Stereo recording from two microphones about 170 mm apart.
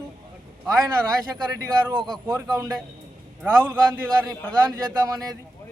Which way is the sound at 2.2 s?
20° right (ahead or behind).